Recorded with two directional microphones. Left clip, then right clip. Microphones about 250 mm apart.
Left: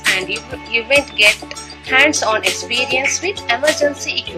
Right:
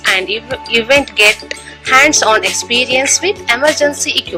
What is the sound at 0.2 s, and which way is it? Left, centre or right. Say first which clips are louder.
Speech: right 5 dB; right.